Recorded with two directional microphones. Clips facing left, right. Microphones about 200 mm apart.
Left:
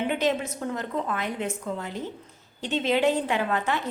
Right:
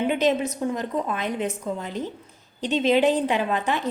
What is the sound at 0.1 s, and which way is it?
A woman's voice, 20° right (ahead or behind).